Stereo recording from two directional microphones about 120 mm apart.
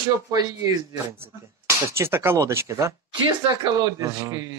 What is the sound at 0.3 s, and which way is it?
Speech, 35° right (ahead or behind).